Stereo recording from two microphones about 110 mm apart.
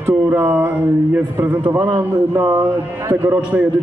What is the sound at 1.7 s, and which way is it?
A man's voice, 30° right (ahead or behind).